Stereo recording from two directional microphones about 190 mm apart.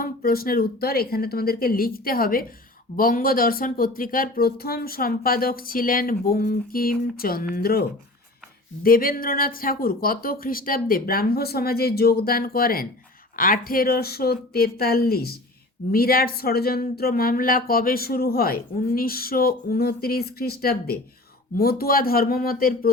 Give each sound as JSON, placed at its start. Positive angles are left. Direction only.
{"t": 0.0, "sound": "speech", "side_deg": 50}